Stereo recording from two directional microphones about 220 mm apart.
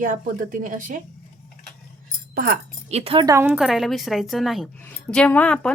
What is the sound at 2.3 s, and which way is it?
Speech, 40° right (ahead or behind).